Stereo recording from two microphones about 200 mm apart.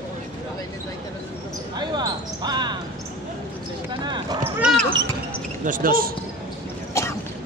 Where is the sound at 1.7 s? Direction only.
20° right (ahead or behind).